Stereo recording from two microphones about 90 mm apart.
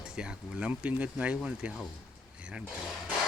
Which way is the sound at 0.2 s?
10° right (ahead or behind).